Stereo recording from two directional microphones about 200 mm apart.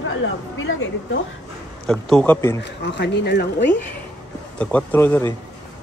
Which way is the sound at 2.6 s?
60° left (ahead or behind).